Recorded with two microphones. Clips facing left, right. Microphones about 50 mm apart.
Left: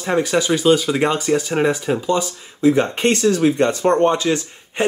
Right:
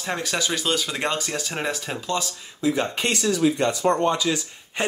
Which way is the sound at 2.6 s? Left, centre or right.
Left.